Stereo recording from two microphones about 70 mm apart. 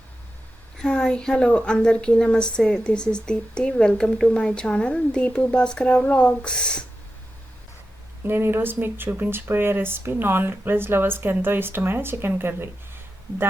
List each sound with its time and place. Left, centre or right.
0.8 s a woman's voice: centre
8.2 s speech: right